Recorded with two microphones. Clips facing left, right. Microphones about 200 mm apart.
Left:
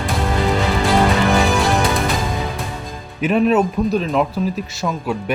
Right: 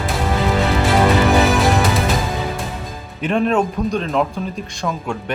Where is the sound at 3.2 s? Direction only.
5° left (ahead or behind).